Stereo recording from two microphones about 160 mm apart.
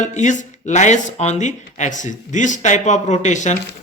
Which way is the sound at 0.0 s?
50° left (ahead or behind).